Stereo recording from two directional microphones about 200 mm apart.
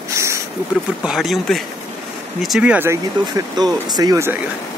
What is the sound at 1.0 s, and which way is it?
Speech, centre (ahead or behind).